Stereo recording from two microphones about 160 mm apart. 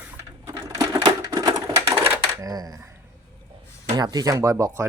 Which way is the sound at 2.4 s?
25° right (ahead or behind).